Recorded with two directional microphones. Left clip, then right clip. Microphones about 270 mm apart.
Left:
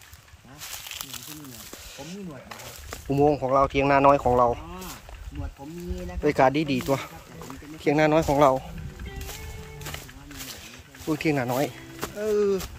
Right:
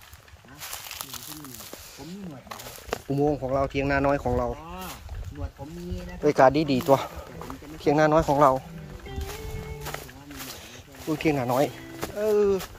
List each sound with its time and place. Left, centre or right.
0.6 s a sound: centre
3.1 s speech: centre
6.2 s speech: centre
9.8 s music: centre
11.1 s speech: centre